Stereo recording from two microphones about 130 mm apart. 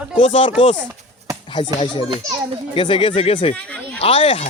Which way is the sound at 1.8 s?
40° left (ahead or behind).